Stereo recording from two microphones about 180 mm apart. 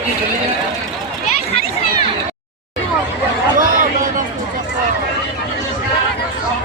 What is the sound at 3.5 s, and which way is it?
Chatter, 45° right (ahead or behind).